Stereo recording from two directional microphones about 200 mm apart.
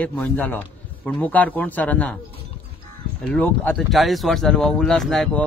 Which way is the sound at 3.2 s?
5° left (ahead or behind).